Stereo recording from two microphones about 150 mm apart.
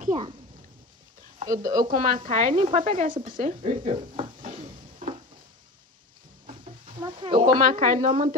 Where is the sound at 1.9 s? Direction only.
60° right (ahead or behind).